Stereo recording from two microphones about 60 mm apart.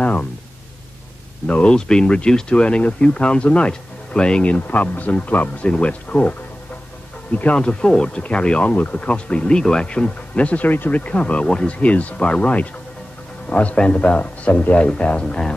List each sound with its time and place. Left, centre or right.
0.0 s a sound: left
1.5 s speech: centre
4.6 s speech: left
7.3 s speech: left